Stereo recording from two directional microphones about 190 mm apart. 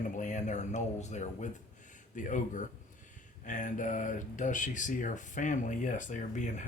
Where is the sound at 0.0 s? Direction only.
40° left (ahead or behind).